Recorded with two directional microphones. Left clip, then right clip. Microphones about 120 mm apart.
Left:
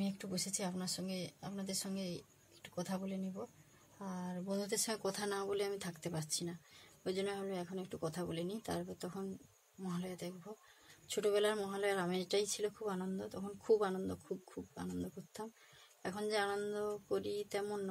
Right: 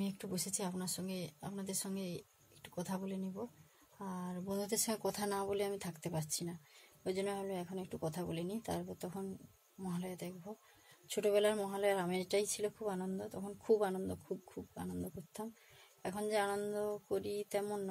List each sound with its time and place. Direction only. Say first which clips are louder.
0.0 s a woman's voice: even; 20° right (ahead or behind)